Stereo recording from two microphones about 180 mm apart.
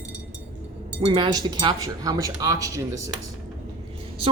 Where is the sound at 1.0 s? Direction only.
25° right (ahead or behind).